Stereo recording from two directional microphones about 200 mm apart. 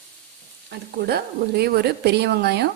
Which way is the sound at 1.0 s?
55° right (ahead or behind).